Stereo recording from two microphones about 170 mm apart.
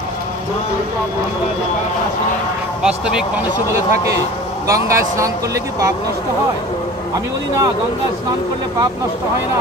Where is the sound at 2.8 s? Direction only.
5° right (ahead or behind).